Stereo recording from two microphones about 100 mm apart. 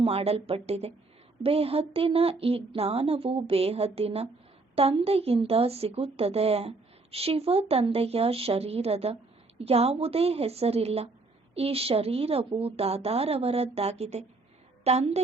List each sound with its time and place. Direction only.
0.0 s speech: 75° right (ahead or behind)
1.4 s a woman's voice: 80° right
11.5 s a woman's voice: 80° right